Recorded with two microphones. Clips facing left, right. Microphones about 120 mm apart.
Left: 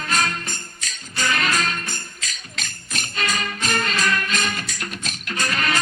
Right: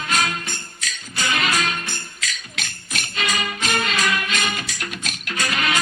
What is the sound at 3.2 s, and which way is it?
Music, 10° right (ahead or behind).